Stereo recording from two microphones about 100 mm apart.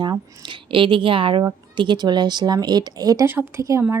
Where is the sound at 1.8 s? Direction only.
50° right (ahead or behind).